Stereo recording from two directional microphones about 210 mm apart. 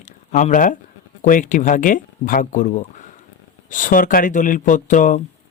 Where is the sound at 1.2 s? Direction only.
40° left (ahead or behind).